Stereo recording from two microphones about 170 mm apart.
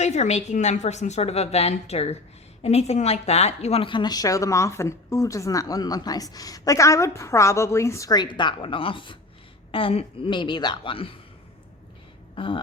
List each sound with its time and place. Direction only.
0.0 s a woman's voice: 40° left (ahead or behind)